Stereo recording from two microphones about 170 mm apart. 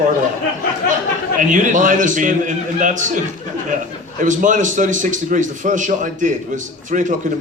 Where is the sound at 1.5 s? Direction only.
50° right (ahead or behind).